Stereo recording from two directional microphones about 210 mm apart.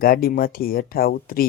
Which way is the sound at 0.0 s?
45° left (ahead or behind).